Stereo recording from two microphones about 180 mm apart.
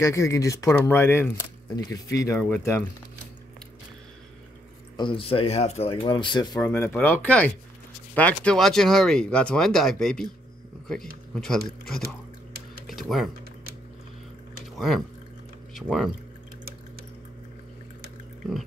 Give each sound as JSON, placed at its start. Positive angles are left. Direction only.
{"t": 0.0, "sound": "speech", "side_deg": 15}
{"t": 4.9, "sound": "speech", "side_deg": 30}
{"t": 6.0, "sound": "speech", "side_deg": 25}
{"t": 11.3, "sound": "speech", "side_deg": 5}
{"t": 14.8, "sound": "speech", "side_deg": 0}